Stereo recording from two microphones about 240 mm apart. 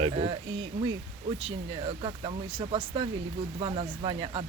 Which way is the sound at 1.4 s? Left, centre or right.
Right.